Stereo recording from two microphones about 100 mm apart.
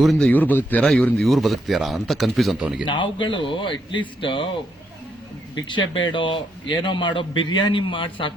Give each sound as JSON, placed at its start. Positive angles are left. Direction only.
{"t": 0.0, "sound": "speech", "side_deg": 0}
{"t": 0.3, "sound": "speech", "side_deg": 15}
{"t": 2.6, "sound": "a man's voice", "side_deg": -10}
{"t": 2.8, "sound": "a man's voice", "side_deg": 55}
{"t": 5.5, "sound": "a man's voice", "side_deg": 55}